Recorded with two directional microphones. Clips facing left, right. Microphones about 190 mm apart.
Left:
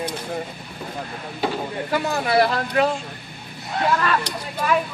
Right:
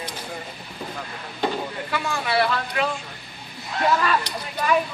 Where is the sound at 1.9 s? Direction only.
40° left (ahead or behind).